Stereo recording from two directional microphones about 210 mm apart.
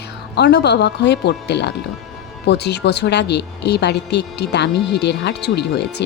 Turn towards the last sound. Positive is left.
turn(degrees=55)  # may be behind; listen again after turning